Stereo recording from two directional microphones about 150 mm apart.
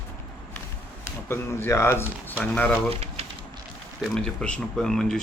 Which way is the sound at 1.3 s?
15° left (ahead or behind).